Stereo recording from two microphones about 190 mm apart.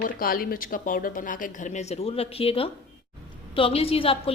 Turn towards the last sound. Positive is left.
turn(degrees=30)  # may be behind; listen again after turning